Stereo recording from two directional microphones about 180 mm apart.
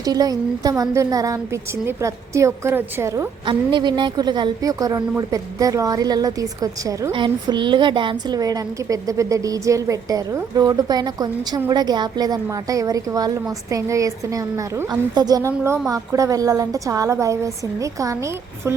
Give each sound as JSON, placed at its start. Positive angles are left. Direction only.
{"t": 0.0, "sound": "a woman's voice", "side_deg": -20}
{"t": 3.4, "sound": "a woman's voice", "side_deg": -25}